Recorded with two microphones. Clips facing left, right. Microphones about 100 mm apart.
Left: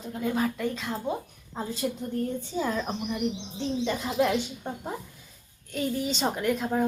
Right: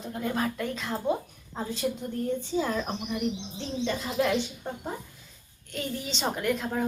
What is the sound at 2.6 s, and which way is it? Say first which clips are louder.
Speech: left 2 dB; 5° left (ahead or behind).